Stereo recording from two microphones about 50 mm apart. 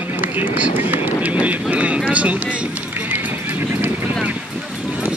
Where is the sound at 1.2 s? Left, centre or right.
Right.